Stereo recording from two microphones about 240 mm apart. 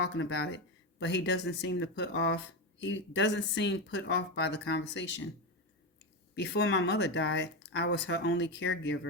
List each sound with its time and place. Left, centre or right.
0.1 s speech: left
6.3 s speech: left